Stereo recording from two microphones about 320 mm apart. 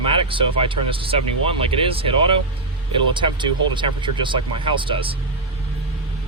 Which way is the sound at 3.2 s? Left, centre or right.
Centre.